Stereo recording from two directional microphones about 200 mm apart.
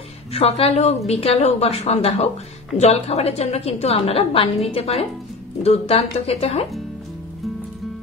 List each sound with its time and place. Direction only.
0.3 s a woman's voice: 30° left (ahead or behind)